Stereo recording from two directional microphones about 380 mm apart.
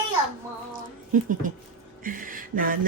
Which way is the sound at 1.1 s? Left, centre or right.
Centre.